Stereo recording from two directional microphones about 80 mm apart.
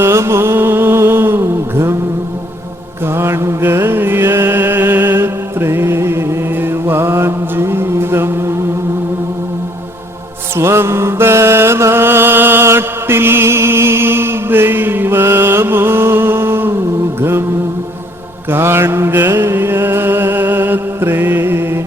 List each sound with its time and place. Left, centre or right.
0.0 s mantra: right
3.1 s mantra: right
10.6 s mantra: right
18.5 s mantra: right